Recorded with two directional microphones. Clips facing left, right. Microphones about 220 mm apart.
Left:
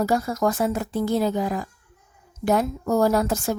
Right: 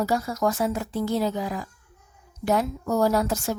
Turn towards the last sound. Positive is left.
turn(degrees=50)  # may be behind; listen again after turning